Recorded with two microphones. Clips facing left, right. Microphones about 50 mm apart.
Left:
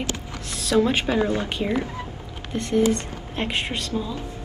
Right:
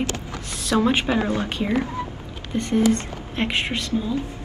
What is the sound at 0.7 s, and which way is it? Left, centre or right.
Speech, right.